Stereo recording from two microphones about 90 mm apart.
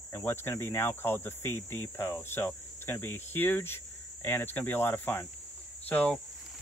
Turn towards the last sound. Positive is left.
turn(degrees=15)  # may be behind; listen again after turning